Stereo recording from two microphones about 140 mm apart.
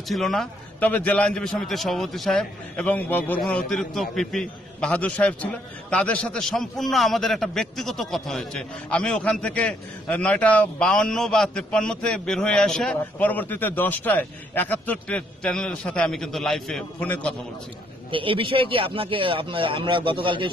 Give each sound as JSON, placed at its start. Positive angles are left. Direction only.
{"t": 0.1, "sound": "a man's voice", "side_deg": 0}
{"t": 18.1, "sound": "speech", "side_deg": -40}